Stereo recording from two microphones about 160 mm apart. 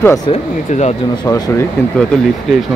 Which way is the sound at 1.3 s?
15° left (ahead or behind).